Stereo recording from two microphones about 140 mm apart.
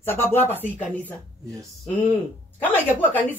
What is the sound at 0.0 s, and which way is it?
Speech, 15° left (ahead or behind).